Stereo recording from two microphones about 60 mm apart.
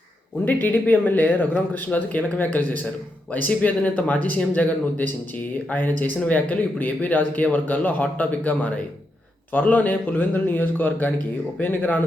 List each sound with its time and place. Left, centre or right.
0.4 s a man's voice: left